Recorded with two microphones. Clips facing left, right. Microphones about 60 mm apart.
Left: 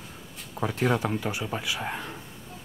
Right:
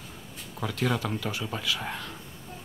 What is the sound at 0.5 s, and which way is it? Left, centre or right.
Speech, left.